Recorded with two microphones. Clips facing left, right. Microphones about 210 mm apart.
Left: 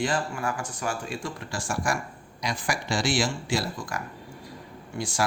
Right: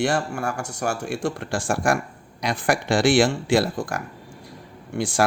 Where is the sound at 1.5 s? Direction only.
55° right (ahead or behind).